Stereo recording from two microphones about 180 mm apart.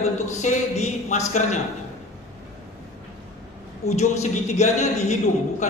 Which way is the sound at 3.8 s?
40° left (ahead or behind).